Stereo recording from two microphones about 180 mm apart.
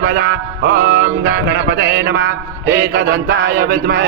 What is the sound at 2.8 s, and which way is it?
Mantra, 55° right (ahead or behind).